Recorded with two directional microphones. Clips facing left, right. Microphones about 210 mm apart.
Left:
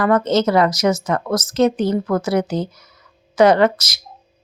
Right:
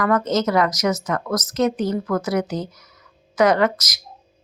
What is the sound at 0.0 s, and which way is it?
Speech, 30° left (ahead or behind).